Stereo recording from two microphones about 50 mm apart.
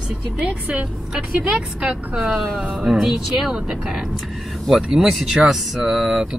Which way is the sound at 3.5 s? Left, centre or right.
Centre.